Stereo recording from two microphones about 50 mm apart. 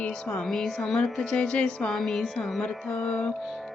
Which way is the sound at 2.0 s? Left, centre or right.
Centre.